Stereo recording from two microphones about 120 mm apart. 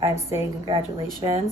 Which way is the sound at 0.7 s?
40° right (ahead or behind).